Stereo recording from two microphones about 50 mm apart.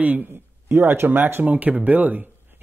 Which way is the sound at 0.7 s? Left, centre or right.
Right.